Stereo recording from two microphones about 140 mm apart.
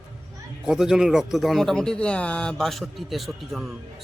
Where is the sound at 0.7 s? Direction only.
Centre (ahead or behind).